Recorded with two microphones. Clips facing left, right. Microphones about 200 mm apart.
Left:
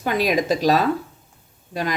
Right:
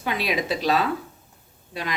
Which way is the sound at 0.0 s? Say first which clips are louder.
Left 6 dB; 45° left (ahead or behind).